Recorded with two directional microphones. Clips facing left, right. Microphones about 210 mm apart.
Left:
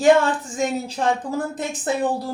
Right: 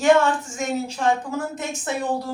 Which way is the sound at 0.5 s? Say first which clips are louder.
Left 2 dB; 35° left (ahead or behind).